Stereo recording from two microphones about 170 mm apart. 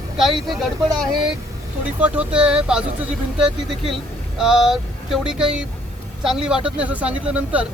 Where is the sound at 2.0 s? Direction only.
5° right (ahead or behind).